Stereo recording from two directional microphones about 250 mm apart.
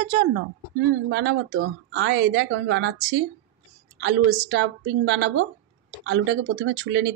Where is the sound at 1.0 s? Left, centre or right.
Right.